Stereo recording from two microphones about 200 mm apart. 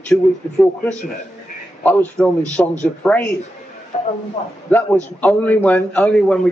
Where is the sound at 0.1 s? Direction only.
5° left (ahead or behind).